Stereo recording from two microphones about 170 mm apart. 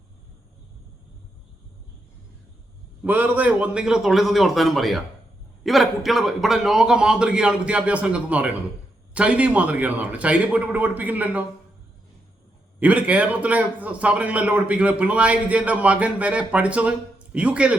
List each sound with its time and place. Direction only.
3.0 s a man's voice: 10° right (ahead or behind)
12.8 s a man's voice: 10° right (ahead or behind)